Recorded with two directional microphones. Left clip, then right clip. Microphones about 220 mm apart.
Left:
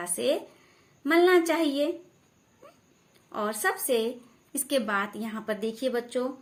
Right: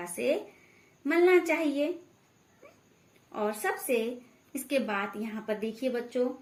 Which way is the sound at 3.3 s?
40° left (ahead or behind).